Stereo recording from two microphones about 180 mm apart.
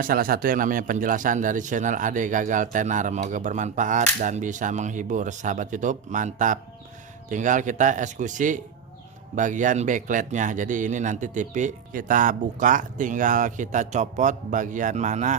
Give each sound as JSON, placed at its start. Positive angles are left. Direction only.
{"t": 0.0, "sound": "a man's voice", "side_deg": -50}